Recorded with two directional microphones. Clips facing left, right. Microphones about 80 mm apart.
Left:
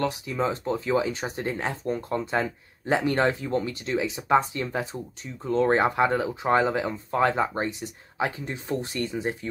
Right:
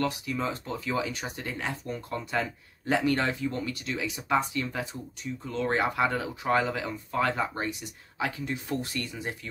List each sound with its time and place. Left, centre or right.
0.0 s speech: left